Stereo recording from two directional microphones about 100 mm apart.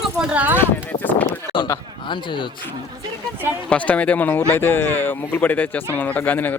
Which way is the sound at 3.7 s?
15° left (ahead or behind).